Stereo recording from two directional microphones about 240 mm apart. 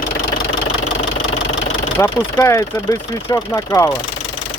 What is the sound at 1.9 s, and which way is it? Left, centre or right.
Speech, centre.